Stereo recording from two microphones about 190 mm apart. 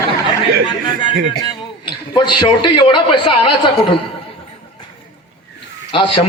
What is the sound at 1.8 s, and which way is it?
A man's voice, 25° left (ahead or behind).